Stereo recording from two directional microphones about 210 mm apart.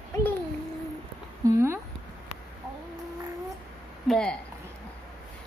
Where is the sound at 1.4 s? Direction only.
15° right (ahead or behind).